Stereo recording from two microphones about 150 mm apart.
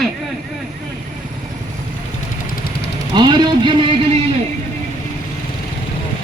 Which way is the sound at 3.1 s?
30° right (ahead or behind).